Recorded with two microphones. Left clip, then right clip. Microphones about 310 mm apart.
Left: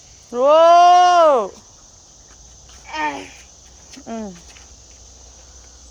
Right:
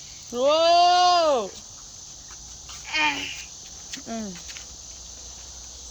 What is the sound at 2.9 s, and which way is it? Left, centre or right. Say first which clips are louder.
Babbling: even; centre.